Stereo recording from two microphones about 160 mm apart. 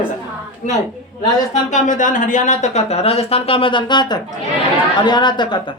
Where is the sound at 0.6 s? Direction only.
50° left (ahead or behind); by 5.7 s 30° left (ahead or behind).